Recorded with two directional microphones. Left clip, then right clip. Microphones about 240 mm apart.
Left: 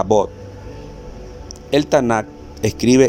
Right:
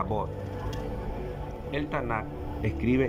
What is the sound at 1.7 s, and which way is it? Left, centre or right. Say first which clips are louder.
Speech: left 16 dB; left.